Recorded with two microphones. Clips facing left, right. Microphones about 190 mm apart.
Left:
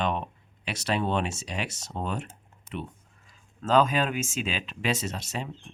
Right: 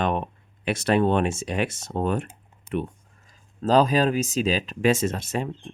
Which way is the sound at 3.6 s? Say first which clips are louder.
Right 4 dB; 35° right (ahead or behind).